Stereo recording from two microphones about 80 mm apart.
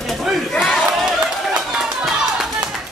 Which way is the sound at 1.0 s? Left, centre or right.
Centre.